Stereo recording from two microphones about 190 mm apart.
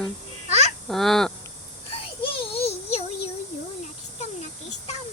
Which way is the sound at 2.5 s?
30° left (ahead or behind).